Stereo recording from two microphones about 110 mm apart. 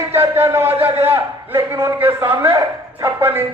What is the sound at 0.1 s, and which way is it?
A man's voice, 25° right (ahead or behind).